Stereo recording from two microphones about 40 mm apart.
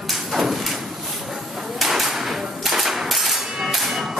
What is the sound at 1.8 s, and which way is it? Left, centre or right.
Music, centre.